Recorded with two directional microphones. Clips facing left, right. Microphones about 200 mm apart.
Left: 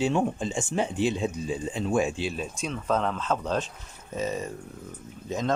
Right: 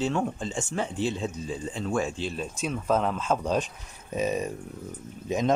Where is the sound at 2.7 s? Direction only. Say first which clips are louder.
Right 2 dB; 5° right (ahead or behind).